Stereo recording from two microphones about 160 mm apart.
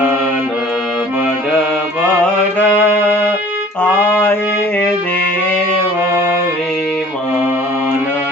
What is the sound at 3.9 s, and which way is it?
Music, 10° right (ahead or behind).